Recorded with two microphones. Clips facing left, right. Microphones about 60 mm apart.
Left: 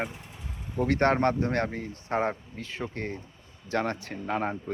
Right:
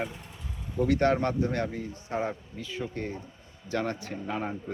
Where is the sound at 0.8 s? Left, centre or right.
Left.